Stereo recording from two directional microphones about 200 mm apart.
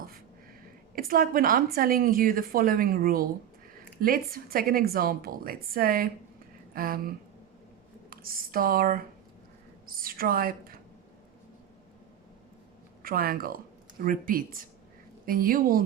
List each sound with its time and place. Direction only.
0.9 s a woman's voice: 45° right (ahead or behind)
8.1 s a woman's voice: 45° right (ahead or behind)
13.0 s a woman's voice: 45° right (ahead or behind)